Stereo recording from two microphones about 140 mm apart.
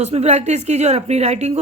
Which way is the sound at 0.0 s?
50° right (ahead or behind).